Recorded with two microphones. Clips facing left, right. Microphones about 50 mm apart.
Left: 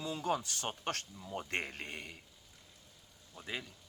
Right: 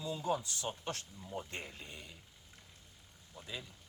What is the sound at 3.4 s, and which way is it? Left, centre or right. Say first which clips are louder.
Speech: left 4 dB; left.